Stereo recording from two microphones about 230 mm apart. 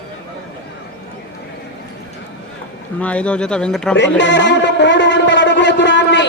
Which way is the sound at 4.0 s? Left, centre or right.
Left.